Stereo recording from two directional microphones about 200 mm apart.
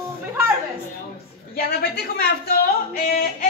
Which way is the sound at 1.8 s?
50° left (ahead or behind).